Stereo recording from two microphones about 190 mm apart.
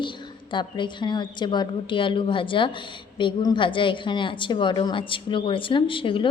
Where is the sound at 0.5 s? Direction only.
25° left (ahead or behind).